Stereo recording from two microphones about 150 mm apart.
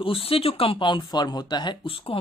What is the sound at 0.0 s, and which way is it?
Speech, 40° left (ahead or behind).